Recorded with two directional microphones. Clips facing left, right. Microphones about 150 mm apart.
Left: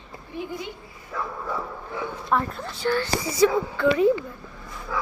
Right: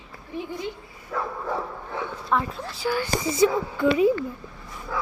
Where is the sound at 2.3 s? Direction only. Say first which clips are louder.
Left 1 dB; centre (ahead or behind).